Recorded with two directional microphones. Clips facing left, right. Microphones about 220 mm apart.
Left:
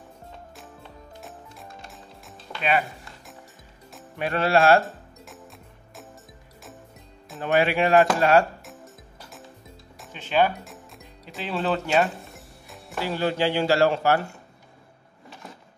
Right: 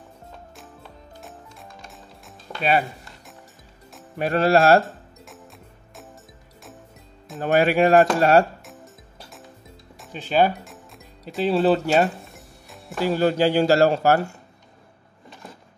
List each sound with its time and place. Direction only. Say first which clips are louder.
1.2 s music: right 1 dB; centre (ahead or behind)
4.2 s speech: right 3 dB; 40° right (ahead or behind)
4.8 s music: even; centre (ahead or behind)
7.4 s speech: right 4 dB; 40° right (ahead or behind)
10.1 s speech: right 3 dB; 35° right (ahead or behind)
10.6 s music: even; centre (ahead or behind)
11.4 s speech: right 7 dB; 35° right (ahead or behind)
12.2 s music: even; centre (ahead or behind)
13.0 s speech: right 5 dB; 40° right (ahead or behind)